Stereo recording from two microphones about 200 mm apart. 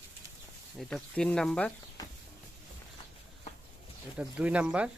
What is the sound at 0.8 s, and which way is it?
Speech, 5° left (ahead or behind).